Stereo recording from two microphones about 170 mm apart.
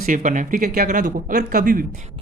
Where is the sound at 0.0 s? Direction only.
50° right (ahead or behind).